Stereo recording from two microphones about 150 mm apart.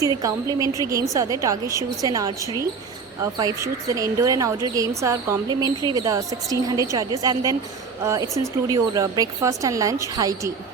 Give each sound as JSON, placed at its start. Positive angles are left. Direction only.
{"t": 0.1, "sound": "a woman's voice", "side_deg": -25}